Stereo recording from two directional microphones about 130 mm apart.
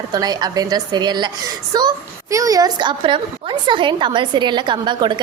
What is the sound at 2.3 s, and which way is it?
A woman's voice, 25° right (ahead or behind).